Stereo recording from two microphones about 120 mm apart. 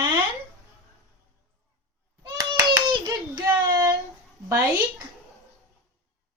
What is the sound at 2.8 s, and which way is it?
Hands, 35° right (ahead or behind).